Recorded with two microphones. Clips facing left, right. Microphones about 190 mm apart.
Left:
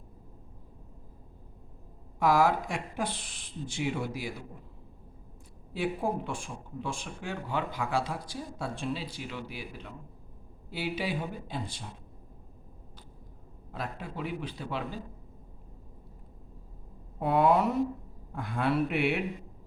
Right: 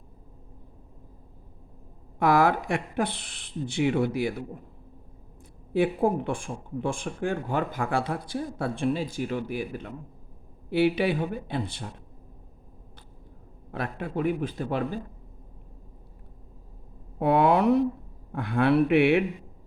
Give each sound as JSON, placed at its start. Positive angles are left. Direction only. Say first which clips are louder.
{"t": 2.1, "sound": "speech", "louder": "right 3 dB", "side_deg": -60}
{"t": 5.7, "sound": "speech", "louder": "right 7 dB", "side_deg": -55}
{"t": 10.7, "sound": "speech", "louder": "right 10 dB", "side_deg": -65}
{"t": 13.7, "sound": "speech", "louder": "right 6 dB", "side_deg": -60}
{"t": 17.2, "sound": "a man's voice", "louder": "right 3 dB", "side_deg": -70}